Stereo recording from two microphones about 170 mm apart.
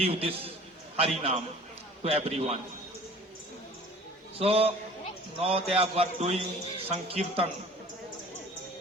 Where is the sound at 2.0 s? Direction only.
35° right (ahead or behind).